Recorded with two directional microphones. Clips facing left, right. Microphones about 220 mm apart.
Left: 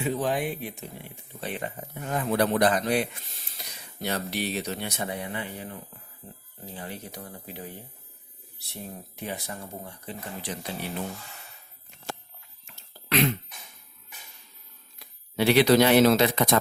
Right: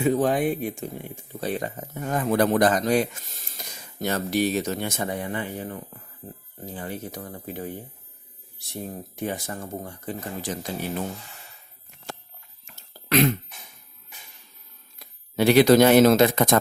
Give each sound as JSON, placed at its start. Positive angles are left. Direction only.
{"t": 0.0, "sound": "speech", "side_deg": -45}
{"t": 9.1, "sound": "speech", "side_deg": -50}
{"t": 12.6, "sound": "cough", "side_deg": -45}
{"t": 14.9, "sound": "speech", "side_deg": -45}